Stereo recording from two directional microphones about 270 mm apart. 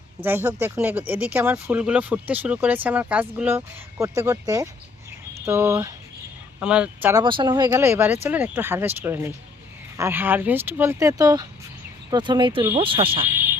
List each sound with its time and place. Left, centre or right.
0.3 s speech: centre